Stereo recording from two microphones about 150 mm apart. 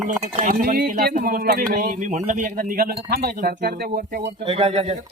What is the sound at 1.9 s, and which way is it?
Speech, 55° right (ahead or behind).